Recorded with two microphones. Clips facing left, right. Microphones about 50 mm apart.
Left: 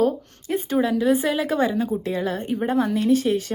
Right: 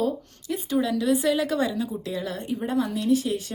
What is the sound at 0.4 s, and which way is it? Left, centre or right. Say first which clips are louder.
A woman's voice: left 3 dB; left.